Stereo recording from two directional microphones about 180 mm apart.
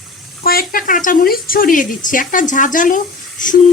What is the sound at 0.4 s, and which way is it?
Speech, 55° left (ahead or behind).